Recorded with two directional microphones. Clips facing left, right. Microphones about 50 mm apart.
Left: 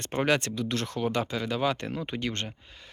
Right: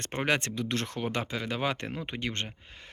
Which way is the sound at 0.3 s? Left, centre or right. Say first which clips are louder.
Left 1 dB; right.